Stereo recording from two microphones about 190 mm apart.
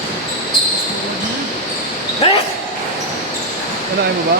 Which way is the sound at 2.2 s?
30° left (ahead or behind).